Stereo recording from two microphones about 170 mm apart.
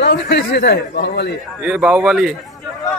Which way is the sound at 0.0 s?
85° left.